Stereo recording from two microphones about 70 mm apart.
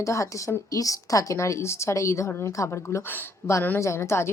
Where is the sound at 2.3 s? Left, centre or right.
Left.